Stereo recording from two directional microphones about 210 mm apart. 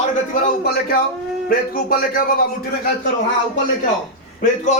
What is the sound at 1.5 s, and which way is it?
Speech, 45° left (ahead or behind).